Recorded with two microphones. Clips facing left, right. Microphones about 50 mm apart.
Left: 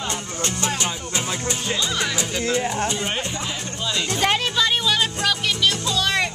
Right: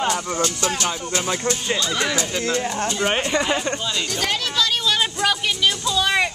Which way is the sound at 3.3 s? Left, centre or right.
Right.